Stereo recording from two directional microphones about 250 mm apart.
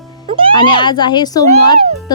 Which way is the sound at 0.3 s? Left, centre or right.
Right.